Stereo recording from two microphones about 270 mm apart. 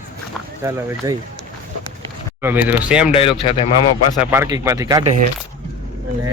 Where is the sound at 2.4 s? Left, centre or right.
Centre.